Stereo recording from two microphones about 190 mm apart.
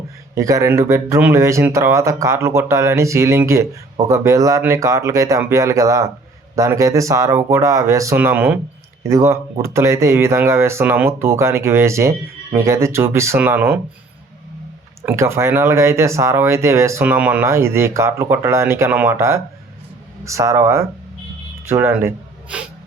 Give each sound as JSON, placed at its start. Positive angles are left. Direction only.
{"t": 0.3, "sound": "speech", "side_deg": -15}
{"t": 15.0, "sound": "speech", "side_deg": -15}